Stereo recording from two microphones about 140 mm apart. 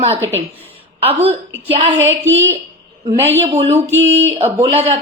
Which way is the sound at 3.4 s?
45° right (ahead or behind).